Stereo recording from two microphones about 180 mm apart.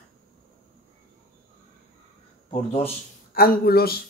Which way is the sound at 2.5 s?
30° left (ahead or behind).